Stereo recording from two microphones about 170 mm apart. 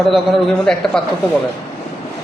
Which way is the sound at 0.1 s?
Centre (ahead or behind).